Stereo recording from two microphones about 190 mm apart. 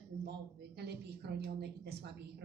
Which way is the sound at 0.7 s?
60° right (ahead or behind).